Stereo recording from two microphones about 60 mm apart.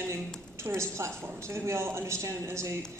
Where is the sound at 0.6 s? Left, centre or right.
Right.